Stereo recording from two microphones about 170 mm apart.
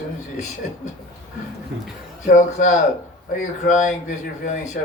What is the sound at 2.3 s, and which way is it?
Speech, 50° left (ahead or behind).